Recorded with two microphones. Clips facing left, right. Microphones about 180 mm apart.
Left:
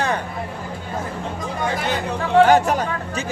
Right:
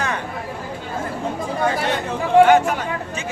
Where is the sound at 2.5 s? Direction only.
40° left (ahead or behind).